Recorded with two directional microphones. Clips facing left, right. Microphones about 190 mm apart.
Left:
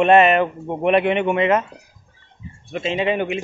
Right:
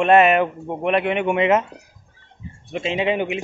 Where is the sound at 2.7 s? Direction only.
15° right (ahead or behind).